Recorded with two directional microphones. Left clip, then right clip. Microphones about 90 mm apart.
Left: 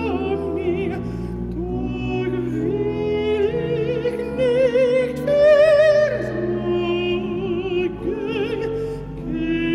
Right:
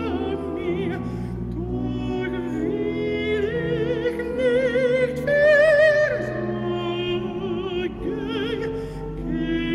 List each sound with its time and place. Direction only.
4.0 s music: 20° left (ahead or behind)